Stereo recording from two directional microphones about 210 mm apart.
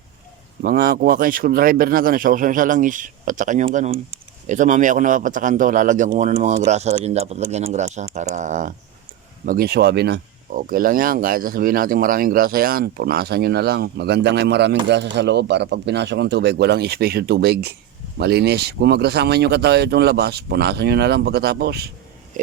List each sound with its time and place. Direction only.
0.6 s speech: 45° right (ahead or behind)